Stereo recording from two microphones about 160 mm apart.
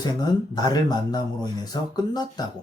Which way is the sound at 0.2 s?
25° left (ahead or behind).